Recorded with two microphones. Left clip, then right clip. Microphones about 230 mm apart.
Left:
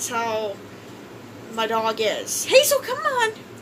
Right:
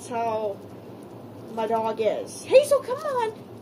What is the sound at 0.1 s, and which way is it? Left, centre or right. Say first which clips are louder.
Speech: left 1 dB; centre.